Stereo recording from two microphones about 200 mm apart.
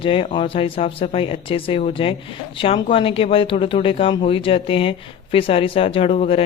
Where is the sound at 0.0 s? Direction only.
30° left (ahead or behind).